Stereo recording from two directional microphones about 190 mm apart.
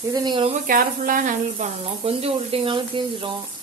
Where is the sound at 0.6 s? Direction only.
45° right (ahead or behind).